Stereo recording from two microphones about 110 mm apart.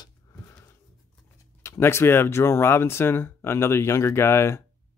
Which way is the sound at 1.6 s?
25° left (ahead or behind).